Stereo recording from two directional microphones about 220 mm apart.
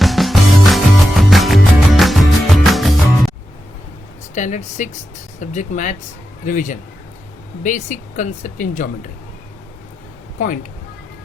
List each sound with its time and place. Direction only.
0.0 s music: centre (ahead or behind)
4.4 s speech: 35° left (ahead or behind)
10.3 s speech: 35° left (ahead or behind)